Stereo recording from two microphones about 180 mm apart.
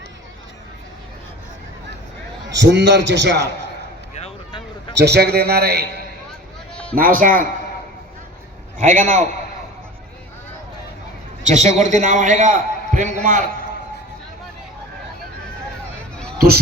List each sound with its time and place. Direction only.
2.5 s a man's voice: 75° right (ahead or behind)
4.1 s a sound: 35° left (ahead or behind)
4.9 s a man's voice: 65° right (ahead or behind)
6.9 s a man's voice: 50° right (ahead or behind)
8.8 s a man's voice: 40° right (ahead or behind)
11.4 s a man's voice: 40° right (ahead or behind)